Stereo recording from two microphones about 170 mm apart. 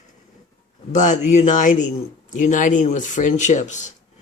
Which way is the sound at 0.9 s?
45° left (ahead or behind).